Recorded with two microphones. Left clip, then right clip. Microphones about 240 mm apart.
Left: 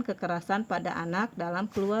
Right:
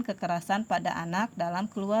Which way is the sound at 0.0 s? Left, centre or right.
Right.